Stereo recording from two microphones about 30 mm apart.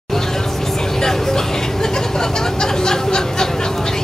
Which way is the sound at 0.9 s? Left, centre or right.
Centre.